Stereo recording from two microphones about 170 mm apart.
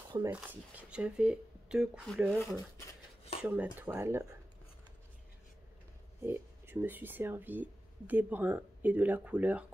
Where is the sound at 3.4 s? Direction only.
10° right (ahead or behind).